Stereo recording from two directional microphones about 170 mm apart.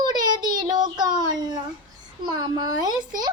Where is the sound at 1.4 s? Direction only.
20° right (ahead or behind).